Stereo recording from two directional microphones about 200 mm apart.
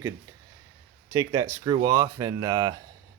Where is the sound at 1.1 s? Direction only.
20° right (ahead or behind).